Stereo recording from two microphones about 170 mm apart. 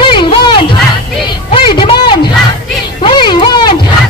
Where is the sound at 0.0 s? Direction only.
30° left (ahead or behind).